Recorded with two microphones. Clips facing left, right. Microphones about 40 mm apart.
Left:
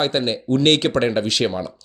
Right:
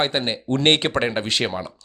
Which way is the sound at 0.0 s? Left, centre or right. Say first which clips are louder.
Left 2 dB; centre.